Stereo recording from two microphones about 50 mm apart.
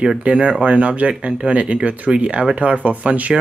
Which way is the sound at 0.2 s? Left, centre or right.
Right.